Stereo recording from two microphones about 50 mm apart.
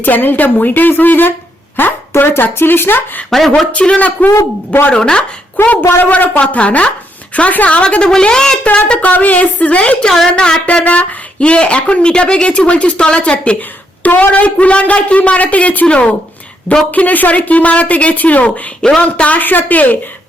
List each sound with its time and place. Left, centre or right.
0.0 s a woman's voice: left
3.2 s speech: centre
3.7 s speech: left
4.9 s speech: centre
5.6 s a woman's voice: left; by 8.5 s centre
8.9 s a woman's voice: left
10.3 s a woman's voice: centre
18.8 s speech: centre
19.0 s a woman's voice: left